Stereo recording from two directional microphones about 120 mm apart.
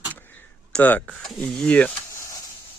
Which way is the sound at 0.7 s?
10° left (ahead or behind).